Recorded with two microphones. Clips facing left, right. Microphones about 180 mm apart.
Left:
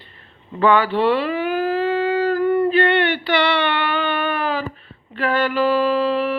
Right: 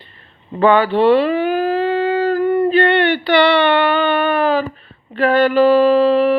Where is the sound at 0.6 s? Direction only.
25° right (ahead or behind).